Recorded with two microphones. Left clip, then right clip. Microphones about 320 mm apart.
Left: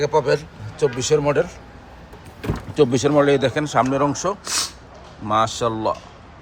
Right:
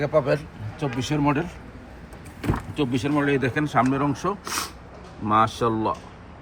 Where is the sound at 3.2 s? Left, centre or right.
Centre.